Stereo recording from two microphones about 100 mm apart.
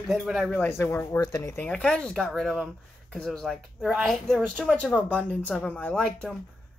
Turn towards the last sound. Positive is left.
turn(degrees=5)  # may be behind; listen again after turning